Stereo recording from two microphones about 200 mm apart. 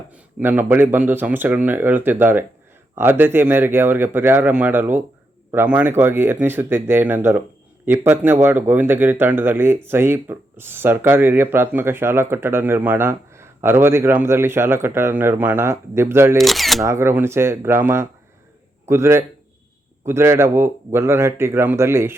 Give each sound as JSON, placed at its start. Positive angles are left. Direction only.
{"t": 0.1, "sound": "speech", "side_deg": -10}
{"t": 16.4, "sound": "speech", "side_deg": 0}
{"t": 16.8, "sound": "speech", "side_deg": -15}